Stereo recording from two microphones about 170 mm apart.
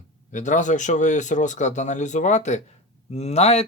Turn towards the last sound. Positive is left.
turn(degrees=40)  # may be behind; listen again after turning